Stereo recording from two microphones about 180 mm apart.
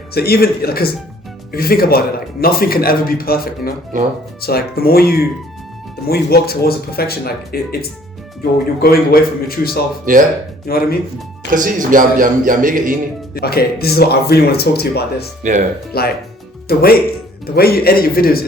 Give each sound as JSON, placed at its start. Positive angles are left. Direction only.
{"t": 0.1, "sound": "a man's voice", "side_deg": 60}
{"t": 3.9, "sound": "a man's voice", "side_deg": -45}
{"t": 4.4, "sound": "a man's voice", "side_deg": 60}
{"t": 11.5, "sound": "a man's voice", "side_deg": -50}
{"t": 13.3, "sound": "a man's voice", "side_deg": 60}